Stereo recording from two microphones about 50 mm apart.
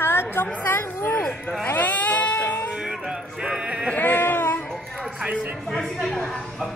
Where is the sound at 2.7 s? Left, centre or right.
Centre.